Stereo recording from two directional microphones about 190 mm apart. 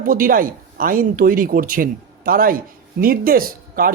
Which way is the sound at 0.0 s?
45° right (ahead or behind).